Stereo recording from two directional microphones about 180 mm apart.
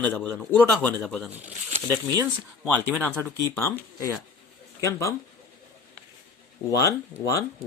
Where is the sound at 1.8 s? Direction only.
10° left (ahead or behind).